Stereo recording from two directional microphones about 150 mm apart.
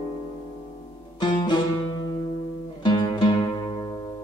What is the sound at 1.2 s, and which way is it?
Music, 30° left (ahead or behind).